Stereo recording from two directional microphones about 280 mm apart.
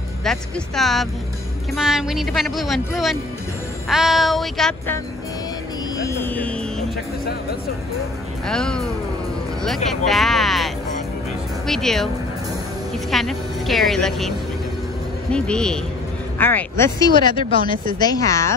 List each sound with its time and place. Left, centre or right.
0.2 s speech: centre
5.9 s music: centre
8.5 s speech: centre
9.8 s speech: centre
13.1 s speech: centre
15.3 s speech: centre